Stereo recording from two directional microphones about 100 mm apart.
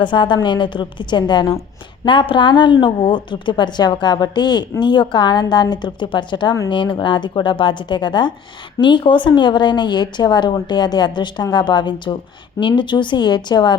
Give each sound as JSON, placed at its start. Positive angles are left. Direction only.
{"t": 0.0, "sound": "speech", "side_deg": 50}